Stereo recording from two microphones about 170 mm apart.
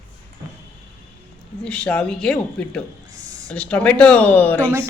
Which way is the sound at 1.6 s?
5° left (ahead or behind).